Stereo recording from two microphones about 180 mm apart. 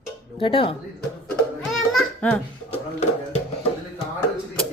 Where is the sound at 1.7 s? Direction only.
Centre (ahead or behind).